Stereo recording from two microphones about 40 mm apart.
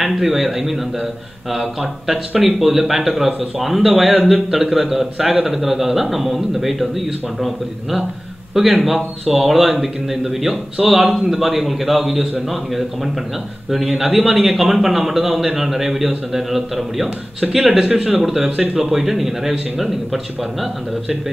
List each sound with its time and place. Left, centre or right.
0.1 s speech: centre
17.7 s speech: centre
18.2 s speech: centre